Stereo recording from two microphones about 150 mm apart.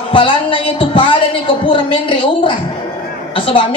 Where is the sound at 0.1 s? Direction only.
35° left (ahead or behind).